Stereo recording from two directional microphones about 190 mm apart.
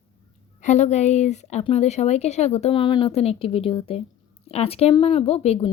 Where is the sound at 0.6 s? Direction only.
40° left (ahead or behind).